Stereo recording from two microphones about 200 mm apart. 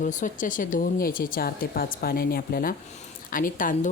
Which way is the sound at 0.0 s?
40° left (ahead or behind).